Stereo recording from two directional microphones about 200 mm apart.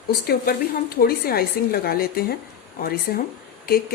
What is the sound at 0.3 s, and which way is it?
A woman's voice, 50° left (ahead or behind).